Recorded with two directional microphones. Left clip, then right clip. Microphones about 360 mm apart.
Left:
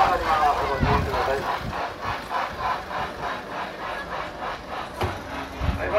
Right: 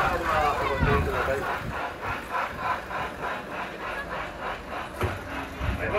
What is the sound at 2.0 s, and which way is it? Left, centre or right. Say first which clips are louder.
Wood: left 1 dB; left.